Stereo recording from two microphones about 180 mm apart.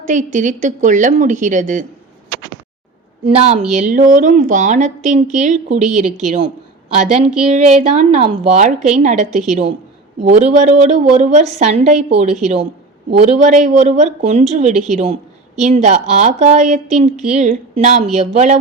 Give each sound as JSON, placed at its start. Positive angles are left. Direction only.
{"t": 0.0, "sound": "a woman's voice", "side_deg": -45}
{"t": 3.2, "sound": "a woman's voice", "side_deg": -30}
{"t": 3.8, "sound": "a woman's voice", "side_deg": -45}